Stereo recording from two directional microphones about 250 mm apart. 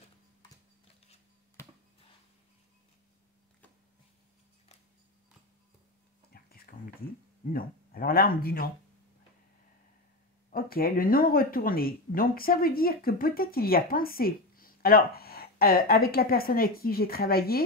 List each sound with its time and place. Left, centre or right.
1.6 s a sound: centre
6.3 s whispering: left
7.5 s speech: left
10.5 s speech: left